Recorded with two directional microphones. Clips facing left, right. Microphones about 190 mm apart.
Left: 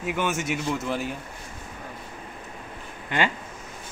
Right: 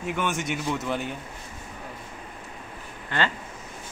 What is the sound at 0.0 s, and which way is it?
Speech, 5° left (ahead or behind).